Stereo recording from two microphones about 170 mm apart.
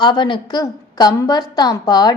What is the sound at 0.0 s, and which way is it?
A woman's voice, 25° left (ahead or behind).